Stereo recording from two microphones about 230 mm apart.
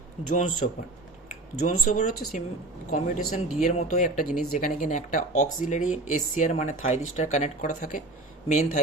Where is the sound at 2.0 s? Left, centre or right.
Left.